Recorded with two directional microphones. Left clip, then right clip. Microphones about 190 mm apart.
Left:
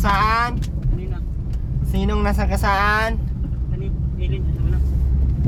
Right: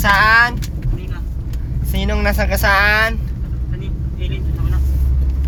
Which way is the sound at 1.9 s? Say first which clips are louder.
Right 3 dB; 25° left (ahead or behind).